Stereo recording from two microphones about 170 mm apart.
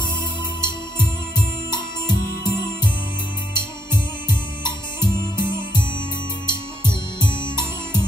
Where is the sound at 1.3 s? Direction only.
25° left (ahead or behind).